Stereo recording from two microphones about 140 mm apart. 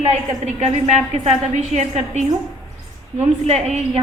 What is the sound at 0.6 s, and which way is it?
A woman's voice, 55° right (ahead or behind).